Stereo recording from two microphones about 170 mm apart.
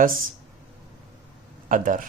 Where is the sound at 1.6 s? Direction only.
50° right (ahead or behind).